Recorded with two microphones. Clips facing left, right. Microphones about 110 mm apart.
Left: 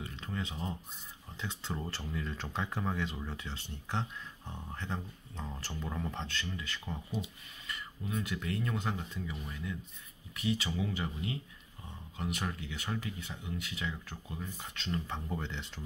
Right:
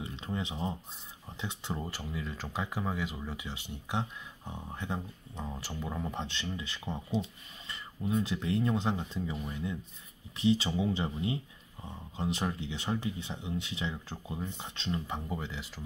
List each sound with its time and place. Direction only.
0.0 s speech: 20° right (ahead or behind); by 15.8 s 5° right (ahead or behind)